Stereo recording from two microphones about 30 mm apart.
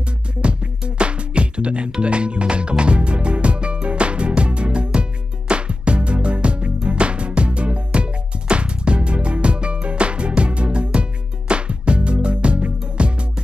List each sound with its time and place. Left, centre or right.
0.4 s music: right